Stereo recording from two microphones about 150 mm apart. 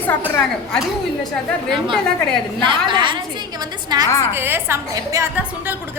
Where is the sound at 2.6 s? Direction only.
30° right (ahead or behind).